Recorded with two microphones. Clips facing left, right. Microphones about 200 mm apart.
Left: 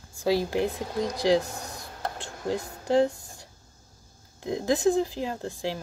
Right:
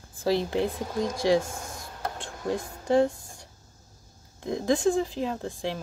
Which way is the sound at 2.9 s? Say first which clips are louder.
Even; 5° left (ahead or behind).